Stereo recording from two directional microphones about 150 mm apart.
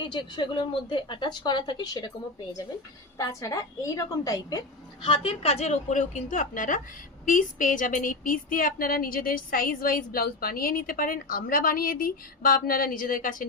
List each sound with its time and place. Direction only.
0.0 s a woman's voice: 30° left (ahead or behind)
3.2 s a woman's voice: 25° left (ahead or behind)
5.0 s a woman's voice: 40° left (ahead or behind); by 13.3 s 65° left (ahead or behind)